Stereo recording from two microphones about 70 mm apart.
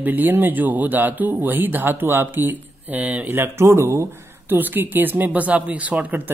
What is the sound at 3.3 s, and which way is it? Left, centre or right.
Speech, right.